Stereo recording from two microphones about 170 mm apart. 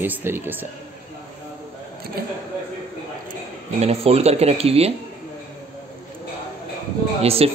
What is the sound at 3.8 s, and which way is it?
Speech, 35° right (ahead or behind).